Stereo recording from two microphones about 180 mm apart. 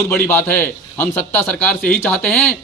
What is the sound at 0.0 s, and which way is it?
A man's voice, 15° left (ahead or behind).